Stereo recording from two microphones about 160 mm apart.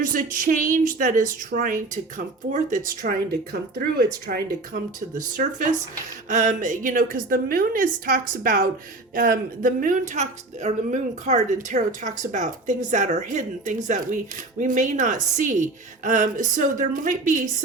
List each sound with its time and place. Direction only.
0.0 s speech: 60° right (ahead or behind)
3.0 s speech: 65° right (ahead or behind)